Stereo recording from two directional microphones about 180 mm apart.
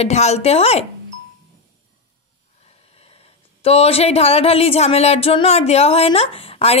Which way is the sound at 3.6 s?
35° left (ahead or behind).